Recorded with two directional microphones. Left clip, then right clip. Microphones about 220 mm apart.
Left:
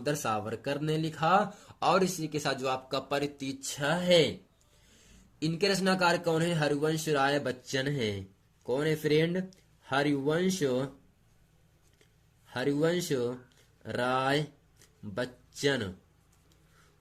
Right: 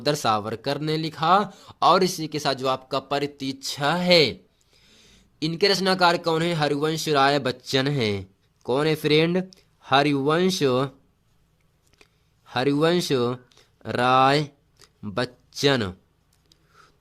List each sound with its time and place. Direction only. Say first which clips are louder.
0.0 s speech: right 9 dB; 40° right (ahead or behind)
5.4 s a man's voice: right 8 dB; 40° right (ahead or behind)
12.5 s a man's voice: right 8 dB; 45° right (ahead or behind)